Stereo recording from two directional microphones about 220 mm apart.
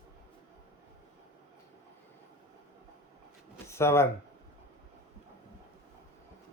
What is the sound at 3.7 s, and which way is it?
Speech, 10° left (ahead or behind).